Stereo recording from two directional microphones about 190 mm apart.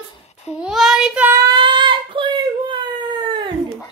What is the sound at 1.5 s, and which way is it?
Child singing, 25° right (ahead or behind).